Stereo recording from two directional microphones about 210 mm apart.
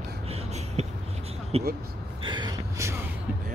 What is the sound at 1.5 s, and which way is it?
Speech, 30° right (ahead or behind).